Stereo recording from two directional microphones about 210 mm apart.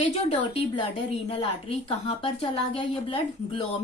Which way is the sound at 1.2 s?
25° left (ahead or behind).